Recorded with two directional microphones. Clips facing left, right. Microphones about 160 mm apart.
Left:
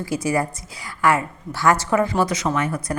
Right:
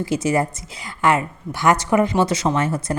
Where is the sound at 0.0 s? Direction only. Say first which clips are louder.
Right 2 dB; 20° right (ahead or behind).